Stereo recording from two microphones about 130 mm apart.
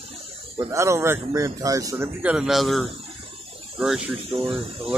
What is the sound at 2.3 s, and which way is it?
Speech, 5° right (ahead or behind).